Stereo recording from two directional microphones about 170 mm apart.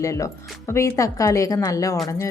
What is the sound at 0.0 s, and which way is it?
Speech, 20° left (ahead or behind).